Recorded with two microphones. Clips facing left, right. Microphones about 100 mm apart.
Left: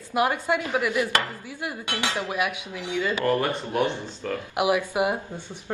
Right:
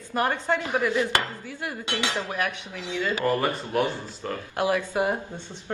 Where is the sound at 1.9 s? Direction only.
20° right (ahead or behind).